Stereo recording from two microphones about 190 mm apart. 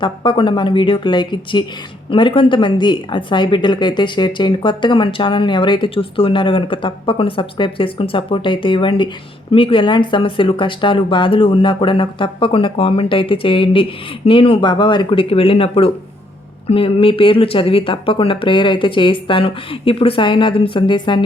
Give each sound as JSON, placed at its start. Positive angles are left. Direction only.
{"t": 0.0, "sound": "speech", "side_deg": 25}